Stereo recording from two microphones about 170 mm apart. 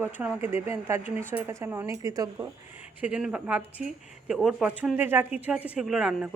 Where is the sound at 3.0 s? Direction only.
5° right (ahead or behind).